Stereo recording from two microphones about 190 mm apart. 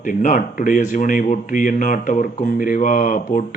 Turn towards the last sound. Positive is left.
turn(degrees=45)  # may be behind; listen again after turning